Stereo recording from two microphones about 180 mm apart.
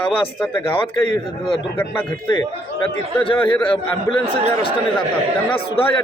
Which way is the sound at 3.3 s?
30° left (ahead or behind).